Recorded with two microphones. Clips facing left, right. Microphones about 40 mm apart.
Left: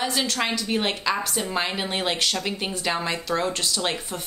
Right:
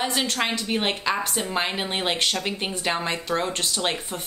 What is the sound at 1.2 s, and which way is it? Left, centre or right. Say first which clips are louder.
Speech: even; right.